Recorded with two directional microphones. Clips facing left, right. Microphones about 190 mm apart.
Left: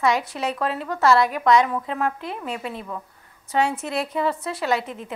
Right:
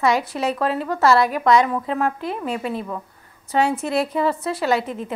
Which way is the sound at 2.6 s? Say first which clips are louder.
Right 5 dB; 35° right (ahead or behind).